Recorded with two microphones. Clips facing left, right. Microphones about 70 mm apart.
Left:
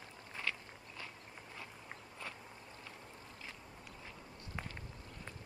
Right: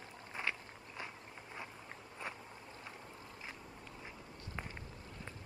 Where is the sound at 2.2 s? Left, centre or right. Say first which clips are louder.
Right 3 dB; right.